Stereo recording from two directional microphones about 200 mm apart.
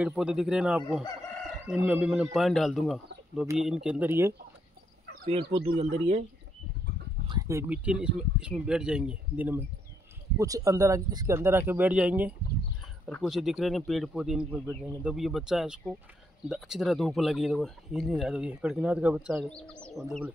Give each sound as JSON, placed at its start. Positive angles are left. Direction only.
{"t": 0.0, "sound": "speech", "side_deg": -5}
{"t": 5.2, "sound": "speech", "side_deg": -30}
{"t": 7.2, "sound": "speech", "side_deg": -15}